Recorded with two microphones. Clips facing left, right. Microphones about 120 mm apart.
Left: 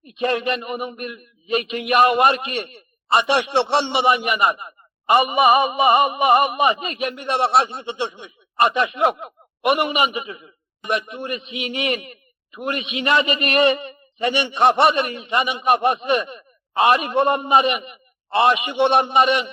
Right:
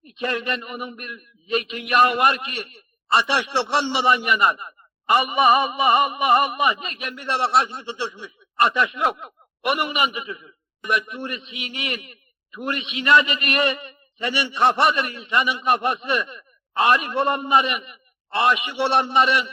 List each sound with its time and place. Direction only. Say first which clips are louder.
0.1 s a man's voice: left 5 dB; 20° left (ahead or behind)